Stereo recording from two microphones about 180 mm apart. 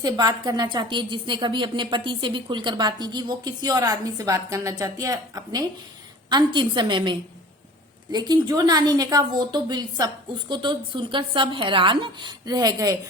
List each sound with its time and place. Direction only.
0.0 s a woman's voice: 20° right (ahead or behind)